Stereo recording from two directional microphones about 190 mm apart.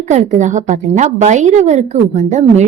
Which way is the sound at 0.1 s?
35° right (ahead or behind).